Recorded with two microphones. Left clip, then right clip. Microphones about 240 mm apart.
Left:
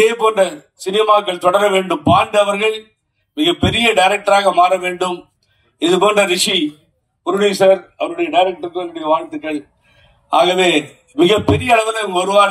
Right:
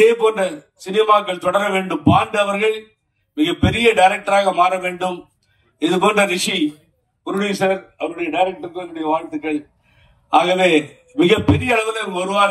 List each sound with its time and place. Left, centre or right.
0.0 s a man's voice: left